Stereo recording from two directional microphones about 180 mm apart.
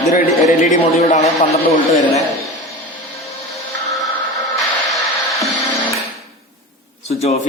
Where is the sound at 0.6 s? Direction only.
40° left (ahead or behind).